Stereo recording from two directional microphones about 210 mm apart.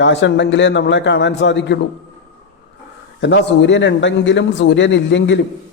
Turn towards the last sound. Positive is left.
turn(degrees=60)  # may be behind; listen again after turning